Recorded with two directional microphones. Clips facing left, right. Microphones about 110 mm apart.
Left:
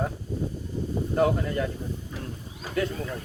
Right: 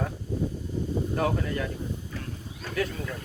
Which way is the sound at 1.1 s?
25° left (ahead or behind).